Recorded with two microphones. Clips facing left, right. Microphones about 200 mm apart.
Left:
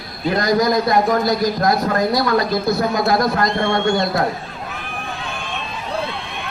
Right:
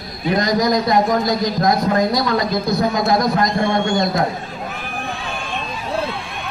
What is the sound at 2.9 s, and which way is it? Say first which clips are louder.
Speech: even; 20° right (ahead or behind).